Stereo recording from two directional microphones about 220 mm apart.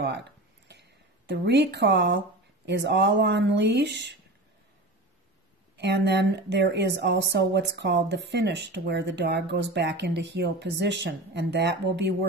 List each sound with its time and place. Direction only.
0.0 s speech: 50° right (ahead or behind)
5.8 s speech: 50° right (ahead or behind)